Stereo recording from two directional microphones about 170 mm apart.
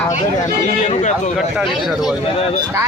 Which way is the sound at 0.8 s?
45° left (ahead or behind).